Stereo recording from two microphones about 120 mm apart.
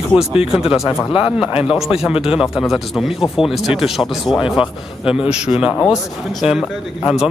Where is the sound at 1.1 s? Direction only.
5° right (ahead or behind).